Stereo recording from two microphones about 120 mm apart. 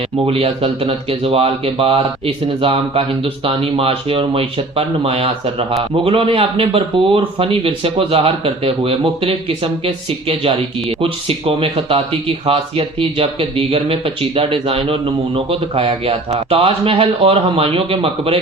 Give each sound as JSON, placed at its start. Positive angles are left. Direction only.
{"t": 0.3, "sound": "speech", "side_deg": -55}